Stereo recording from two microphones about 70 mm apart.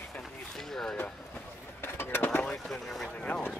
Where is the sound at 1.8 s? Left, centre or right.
Left.